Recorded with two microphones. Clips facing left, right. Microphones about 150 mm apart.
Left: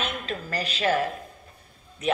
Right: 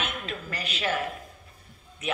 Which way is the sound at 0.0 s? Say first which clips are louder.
Left 3 dB; 35° left (ahead or behind).